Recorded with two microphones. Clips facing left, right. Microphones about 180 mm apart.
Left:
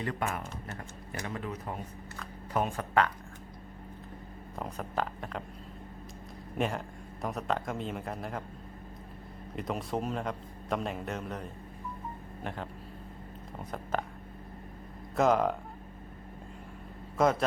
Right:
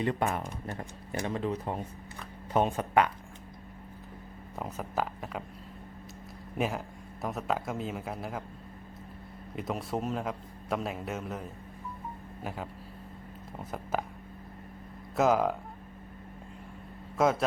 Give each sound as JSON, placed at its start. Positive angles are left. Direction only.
{"t": 0.0, "sound": "speech", "side_deg": -25}
{"t": 4.5, "sound": "a man's voice", "side_deg": -5}
{"t": 6.6, "sound": "a man's voice", "side_deg": -5}
{"t": 9.6, "sound": "a man's voice", "side_deg": 0}
{"t": 15.1, "sound": "speech", "side_deg": -5}
{"t": 17.2, "sound": "a man's voice", "side_deg": 0}